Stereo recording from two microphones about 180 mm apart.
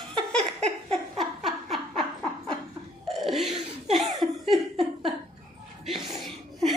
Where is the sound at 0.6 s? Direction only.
35° right (ahead or behind).